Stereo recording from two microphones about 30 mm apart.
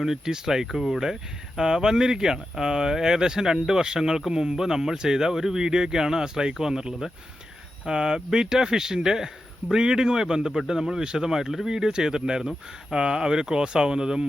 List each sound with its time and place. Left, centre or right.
0.0 s speech: centre
5.6 s speech: right